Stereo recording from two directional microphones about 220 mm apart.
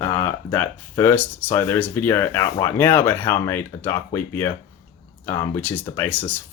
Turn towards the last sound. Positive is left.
turn(degrees=10)  # may be behind; listen again after turning